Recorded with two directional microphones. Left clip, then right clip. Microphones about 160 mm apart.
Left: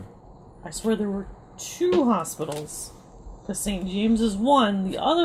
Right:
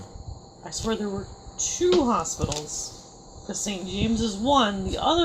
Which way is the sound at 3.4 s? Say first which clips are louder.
Even; 50° left (ahead or behind).